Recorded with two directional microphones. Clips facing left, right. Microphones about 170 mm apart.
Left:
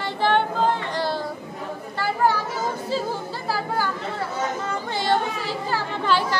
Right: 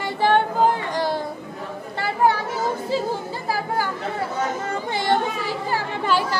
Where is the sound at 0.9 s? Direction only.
15° right (ahead or behind).